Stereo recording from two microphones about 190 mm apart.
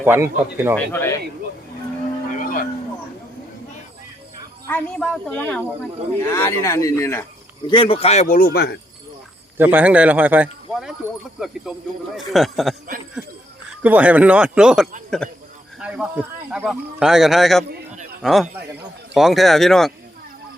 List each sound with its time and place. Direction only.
0.0 s speech: 10° right (ahead or behind)
0.8 s speech: 10° left (ahead or behind)
2.4 s vehicle: 45° left (ahead or behind)
4.7 s speech: 5° left (ahead or behind)
7.7 s speech: 25° left (ahead or behind); by 8.8 s 60° left (ahead or behind)
9.6 s a man's voice: 10° right (ahead or behind)